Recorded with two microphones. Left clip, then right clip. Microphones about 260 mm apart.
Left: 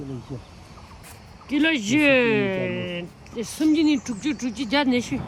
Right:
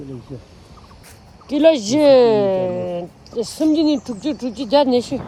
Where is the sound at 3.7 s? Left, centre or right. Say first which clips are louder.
Right 4 dB; centre.